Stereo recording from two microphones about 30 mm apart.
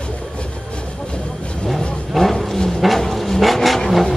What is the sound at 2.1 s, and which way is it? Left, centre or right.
Vehicle, centre.